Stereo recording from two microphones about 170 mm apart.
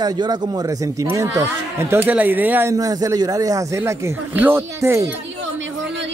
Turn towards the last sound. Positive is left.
turn(degrees=-15)  # may be behind; listen again after turning